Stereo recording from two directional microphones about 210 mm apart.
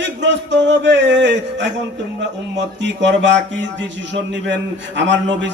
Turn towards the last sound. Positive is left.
turn(degrees=-60)  # may be behind; listen again after turning